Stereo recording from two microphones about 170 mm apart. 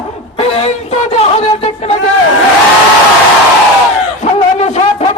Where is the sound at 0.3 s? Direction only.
40° left (ahead or behind).